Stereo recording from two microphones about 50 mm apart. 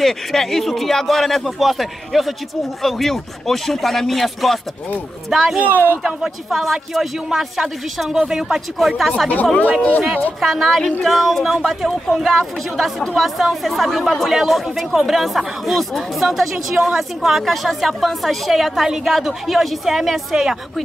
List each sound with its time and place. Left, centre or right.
0.0 s speech: centre
5.6 s speech: right
6.0 s speech: centre
10.4 s speech: centre
13.4 s speech: centre